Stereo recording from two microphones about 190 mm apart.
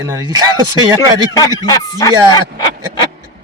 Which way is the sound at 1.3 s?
20° left (ahead or behind).